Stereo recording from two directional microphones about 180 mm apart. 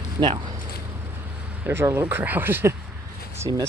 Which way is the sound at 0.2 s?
25° right (ahead or behind).